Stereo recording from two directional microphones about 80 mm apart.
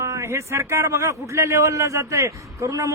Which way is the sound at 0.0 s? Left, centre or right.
Right.